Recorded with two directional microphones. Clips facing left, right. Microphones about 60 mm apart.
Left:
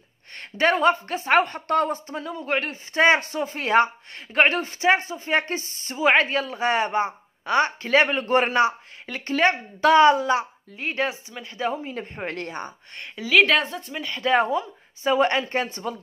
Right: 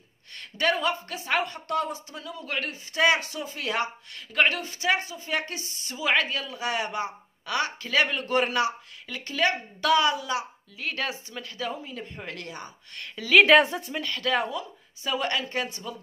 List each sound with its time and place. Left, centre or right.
0.4 s a woman's voice: left
13.0 s a woman's voice: centre
13.3 s a woman's voice: centre
14.0 s a woman's voice: left